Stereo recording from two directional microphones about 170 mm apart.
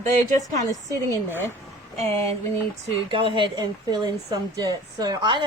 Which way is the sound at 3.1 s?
30° right (ahead or behind).